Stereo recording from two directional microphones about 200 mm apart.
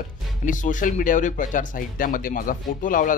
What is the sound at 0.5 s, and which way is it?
Speech, 40° left (ahead or behind).